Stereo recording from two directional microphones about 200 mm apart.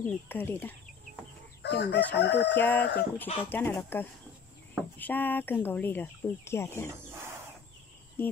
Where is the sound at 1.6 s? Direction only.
55° left (ahead or behind).